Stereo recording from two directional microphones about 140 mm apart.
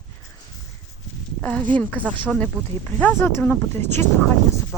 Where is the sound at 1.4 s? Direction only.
10° left (ahead or behind).